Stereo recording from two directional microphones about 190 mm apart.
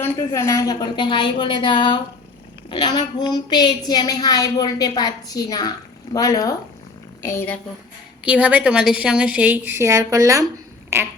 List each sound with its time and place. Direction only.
0.0 s a woman's voice: 15° left (ahead or behind)
8.2 s a woman's voice: 5° right (ahead or behind)
10.9 s a sound: 15° right (ahead or behind)